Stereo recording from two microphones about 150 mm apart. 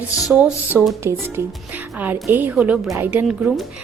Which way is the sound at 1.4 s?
15° right (ahead or behind).